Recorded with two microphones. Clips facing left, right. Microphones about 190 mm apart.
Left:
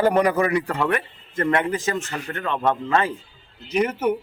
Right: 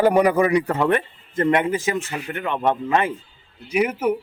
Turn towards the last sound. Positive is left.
turn(degrees=-10)  # may be behind; listen again after turning